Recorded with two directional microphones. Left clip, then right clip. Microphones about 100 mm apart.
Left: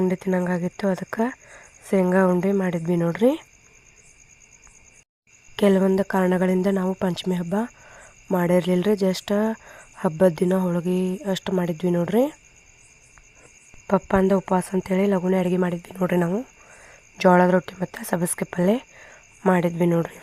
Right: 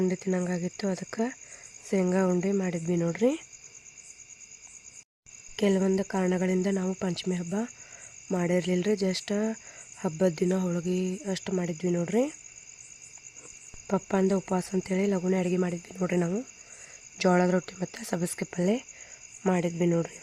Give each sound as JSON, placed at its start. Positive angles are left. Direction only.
{"t": 0.2, "sound": "speech", "side_deg": 25}
{"t": 5.5, "sound": "speech", "side_deg": 45}
{"t": 13.8, "sound": "speech", "side_deg": 30}